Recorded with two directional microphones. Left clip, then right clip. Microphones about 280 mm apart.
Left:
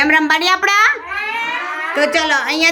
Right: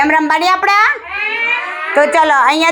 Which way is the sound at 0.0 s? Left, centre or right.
Centre.